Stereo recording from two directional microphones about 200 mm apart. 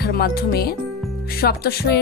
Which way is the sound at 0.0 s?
50° left (ahead or behind).